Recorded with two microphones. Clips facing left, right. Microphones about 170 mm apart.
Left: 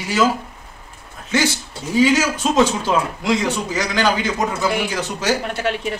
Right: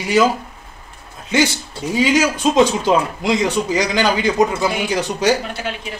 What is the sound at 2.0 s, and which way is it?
Speech, 15° right (ahead or behind).